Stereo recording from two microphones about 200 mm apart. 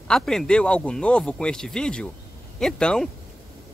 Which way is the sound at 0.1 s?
Centre (ahead or behind).